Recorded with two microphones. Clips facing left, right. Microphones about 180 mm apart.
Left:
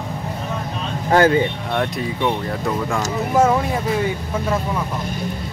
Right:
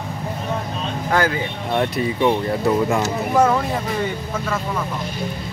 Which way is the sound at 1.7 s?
5° right (ahead or behind).